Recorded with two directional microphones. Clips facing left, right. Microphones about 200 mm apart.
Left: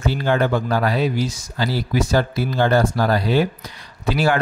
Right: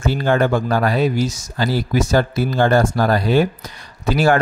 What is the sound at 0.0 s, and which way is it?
Speech, 50° right (ahead or behind).